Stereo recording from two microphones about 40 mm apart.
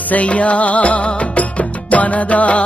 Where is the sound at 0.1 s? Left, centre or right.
Left.